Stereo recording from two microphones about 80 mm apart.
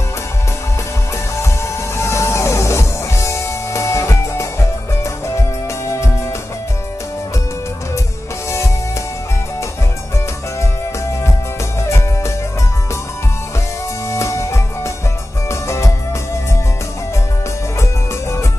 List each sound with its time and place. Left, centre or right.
2.0 s music: left
14.1 s music: left